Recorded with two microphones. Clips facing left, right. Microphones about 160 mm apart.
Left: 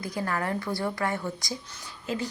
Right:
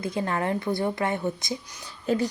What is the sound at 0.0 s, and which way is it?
A woman's voice, 25° right (ahead or behind).